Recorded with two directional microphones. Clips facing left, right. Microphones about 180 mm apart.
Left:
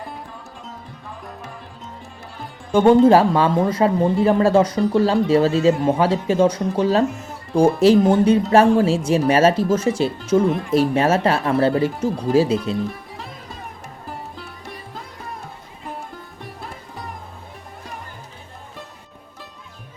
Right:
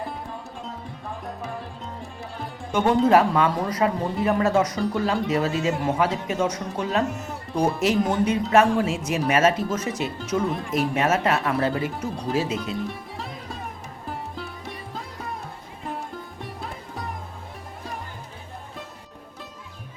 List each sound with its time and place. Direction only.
2.7 s speech: 30° left (ahead or behind)
12.7 s music: centre (ahead or behind)